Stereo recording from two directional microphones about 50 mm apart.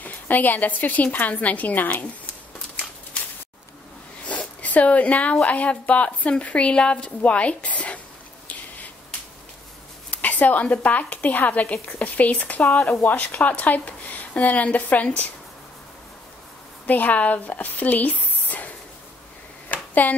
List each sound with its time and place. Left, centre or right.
0.0 s a woman's voice: left
4.3 s speech: left
10.1 s a woman's voice: left
16.8 s speech: left
19.7 s a sound: left